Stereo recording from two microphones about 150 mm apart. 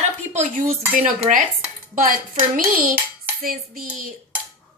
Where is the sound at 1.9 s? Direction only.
65° right (ahead or behind).